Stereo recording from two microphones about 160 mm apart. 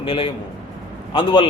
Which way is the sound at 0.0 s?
35° left (ahead or behind).